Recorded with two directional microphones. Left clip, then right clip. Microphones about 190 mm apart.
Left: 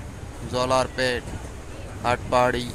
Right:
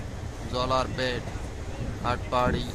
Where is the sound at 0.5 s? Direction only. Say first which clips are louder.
Left 5 dB; 10° left (ahead or behind).